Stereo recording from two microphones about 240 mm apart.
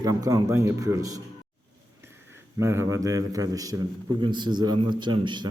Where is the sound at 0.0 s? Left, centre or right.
Centre.